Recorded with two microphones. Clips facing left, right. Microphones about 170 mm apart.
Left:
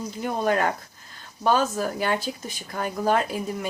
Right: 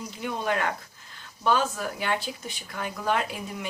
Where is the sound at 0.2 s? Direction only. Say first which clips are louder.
Left 5 dB; 40° left (ahead or behind).